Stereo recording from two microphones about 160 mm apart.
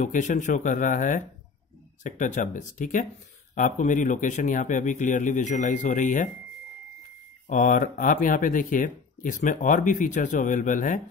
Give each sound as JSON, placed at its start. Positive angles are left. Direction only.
{"t": 0.0, "sound": "a man's voice", "side_deg": 50}
{"t": 7.4, "sound": "speech", "side_deg": 55}